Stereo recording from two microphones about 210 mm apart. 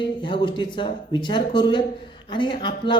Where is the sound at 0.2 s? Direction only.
20° left (ahead or behind).